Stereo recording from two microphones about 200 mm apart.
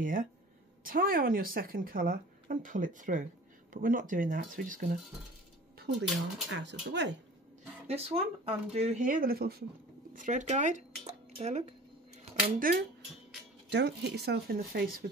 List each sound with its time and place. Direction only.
0.0 s speech: 45° right (ahead or behind)
5.8 s a sound: 60° right (ahead or behind)
6.5 s speech: 60° right (ahead or behind)
7.9 s speech: 30° right (ahead or behind); by 9.7 s 50° right (ahead or behind)
10.1 s speech: 40° right (ahead or behind)
12.5 s speech: 45° right (ahead or behind)
13.7 s speech: 60° right (ahead or behind)